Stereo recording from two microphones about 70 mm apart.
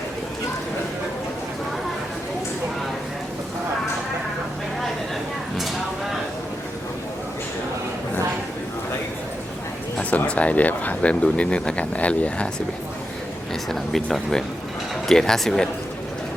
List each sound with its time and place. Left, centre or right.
10.0 s speech: left
13.7 s speech: centre